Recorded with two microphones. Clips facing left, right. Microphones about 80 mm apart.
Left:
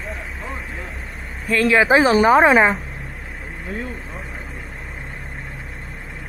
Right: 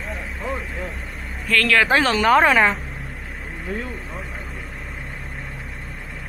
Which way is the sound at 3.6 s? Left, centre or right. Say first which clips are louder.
Even; centre.